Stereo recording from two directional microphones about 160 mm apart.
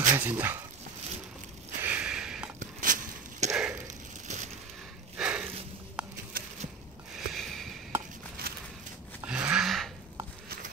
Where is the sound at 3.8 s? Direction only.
50° right (ahead or behind).